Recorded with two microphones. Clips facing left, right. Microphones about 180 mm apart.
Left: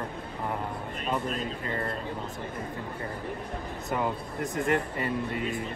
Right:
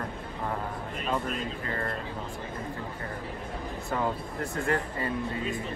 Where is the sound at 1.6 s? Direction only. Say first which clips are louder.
Left 1 dB; 25° left (ahead or behind).